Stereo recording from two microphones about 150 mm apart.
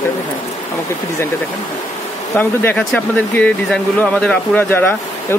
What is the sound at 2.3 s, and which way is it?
Speech, 15° left (ahead or behind).